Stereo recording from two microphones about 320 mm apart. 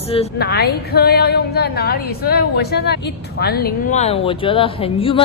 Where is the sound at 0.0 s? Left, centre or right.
Centre.